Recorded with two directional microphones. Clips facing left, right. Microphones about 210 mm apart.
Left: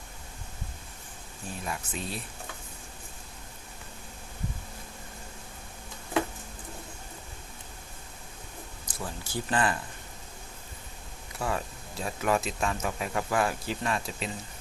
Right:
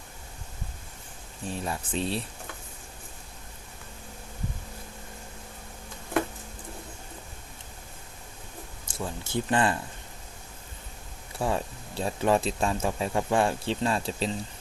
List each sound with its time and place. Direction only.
1.5 s speech: 30° right (ahead or behind)
8.9 s speech: 25° right (ahead or behind)
11.3 s speech: 30° right (ahead or behind)